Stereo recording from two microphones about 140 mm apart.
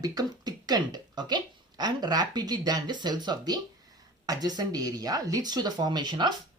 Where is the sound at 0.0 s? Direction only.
25° right (ahead or behind).